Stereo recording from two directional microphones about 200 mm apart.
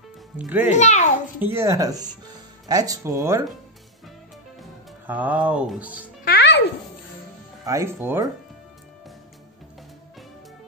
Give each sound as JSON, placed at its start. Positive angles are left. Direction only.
{"t": 0.4, "sound": "speech", "side_deg": -5}
{"t": 0.7, "sound": "a child's voice", "side_deg": 35}
{"t": 1.4, "sound": "speech", "side_deg": -10}
{"t": 5.0, "sound": "speech", "side_deg": -10}
{"t": 6.2, "sound": "music", "side_deg": 55}
{"t": 7.6, "sound": "speech", "side_deg": -15}